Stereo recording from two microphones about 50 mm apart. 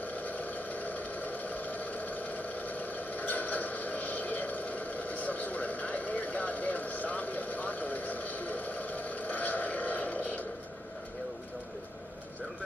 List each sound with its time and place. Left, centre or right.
0.2 s vehicle: left